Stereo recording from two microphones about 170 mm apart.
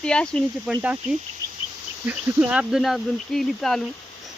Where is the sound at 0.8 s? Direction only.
10° right (ahead or behind).